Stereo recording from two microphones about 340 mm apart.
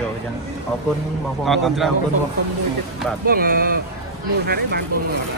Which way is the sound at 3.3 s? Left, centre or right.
Right.